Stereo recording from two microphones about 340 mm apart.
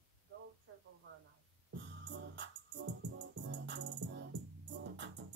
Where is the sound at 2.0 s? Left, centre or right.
Right.